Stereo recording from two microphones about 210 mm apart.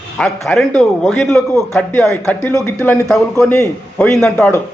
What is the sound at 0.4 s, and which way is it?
A man's voice, centre (ahead or behind).